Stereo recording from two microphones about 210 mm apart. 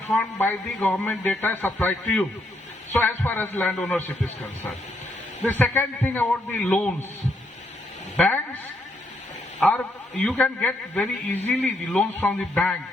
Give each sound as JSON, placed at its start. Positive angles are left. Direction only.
{"t": 0.1, "sound": "a man's voice", "side_deg": 5}
{"t": 5.4, "sound": "a man's voice", "side_deg": 10}
{"t": 8.1, "sound": "speech", "side_deg": 10}
{"t": 9.6, "sound": "a man's voice", "side_deg": 5}